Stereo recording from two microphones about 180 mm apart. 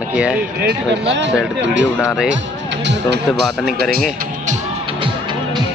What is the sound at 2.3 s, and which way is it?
Music, 80° right.